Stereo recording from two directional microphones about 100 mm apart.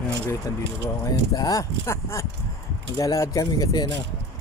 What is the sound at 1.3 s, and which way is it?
Speech, 40° left (ahead or behind).